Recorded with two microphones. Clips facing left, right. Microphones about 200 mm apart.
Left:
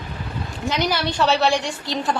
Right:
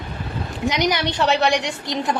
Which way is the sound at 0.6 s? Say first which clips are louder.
Right 2 dB; 15° right (ahead or behind).